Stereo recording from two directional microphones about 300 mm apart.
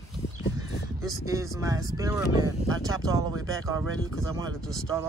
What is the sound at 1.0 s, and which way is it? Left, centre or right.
Speech, centre.